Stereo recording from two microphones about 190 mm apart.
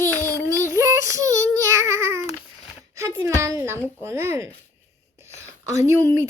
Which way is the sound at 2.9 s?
15° right (ahead or behind).